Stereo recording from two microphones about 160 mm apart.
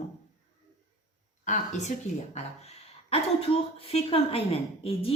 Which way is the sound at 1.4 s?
50° left (ahead or behind).